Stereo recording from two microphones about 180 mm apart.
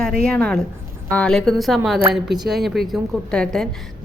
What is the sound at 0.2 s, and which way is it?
A woman's voice, 5° left (ahead or behind).